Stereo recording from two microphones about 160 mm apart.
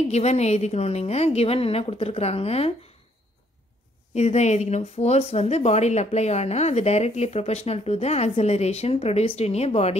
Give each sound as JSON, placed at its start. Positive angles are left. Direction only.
{"t": 0.1, "sound": "a woman's voice", "side_deg": 45}
{"t": 4.1, "sound": "speech", "side_deg": 45}